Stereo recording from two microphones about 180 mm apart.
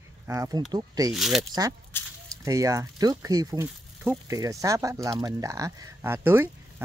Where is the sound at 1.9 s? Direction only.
10° left (ahead or behind).